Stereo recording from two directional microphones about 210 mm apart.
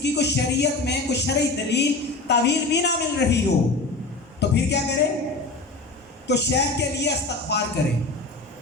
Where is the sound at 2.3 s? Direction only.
55° left (ahead or behind).